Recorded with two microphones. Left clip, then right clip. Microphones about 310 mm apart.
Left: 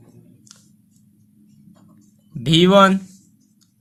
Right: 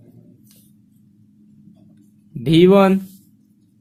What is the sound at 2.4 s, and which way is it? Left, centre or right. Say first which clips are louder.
Speech: even; left.